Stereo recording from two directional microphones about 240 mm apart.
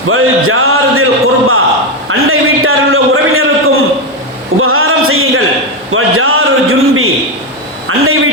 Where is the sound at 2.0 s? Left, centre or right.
Right.